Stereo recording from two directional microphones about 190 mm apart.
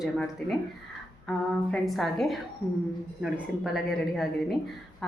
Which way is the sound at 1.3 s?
5° left (ahead or behind).